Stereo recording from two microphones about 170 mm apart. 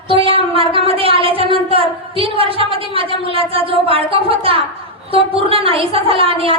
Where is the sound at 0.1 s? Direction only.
30° right (ahead or behind).